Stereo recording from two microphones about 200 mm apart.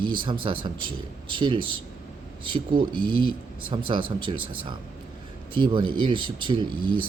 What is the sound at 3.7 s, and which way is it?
Speech, 25° right (ahead or behind).